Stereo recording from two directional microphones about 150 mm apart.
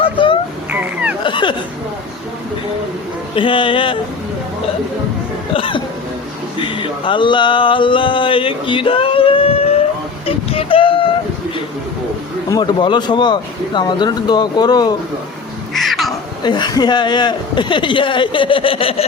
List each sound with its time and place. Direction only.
0.0 s a sound: 35° left (ahead or behind)
3.3 s speech: 35° left (ahead or behind)
5.5 s hiccup: 35° left (ahead or behind)
6.6 s a sound: 35° left (ahead or behind)
12.5 s speech: 30° left (ahead or behind)
15.7 s crow: centre (ahead or behind)
16.4 s speech: 30° left (ahead or behind)